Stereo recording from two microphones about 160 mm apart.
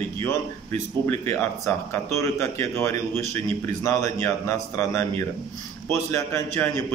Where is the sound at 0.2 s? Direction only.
15° left (ahead or behind).